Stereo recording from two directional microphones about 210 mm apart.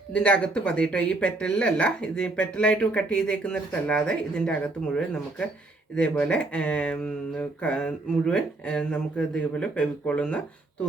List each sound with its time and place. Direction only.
0.1 s speech: 5° left (ahead or behind)